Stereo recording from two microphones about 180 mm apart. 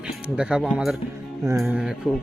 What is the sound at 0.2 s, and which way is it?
Speech, 5° right (ahead or behind).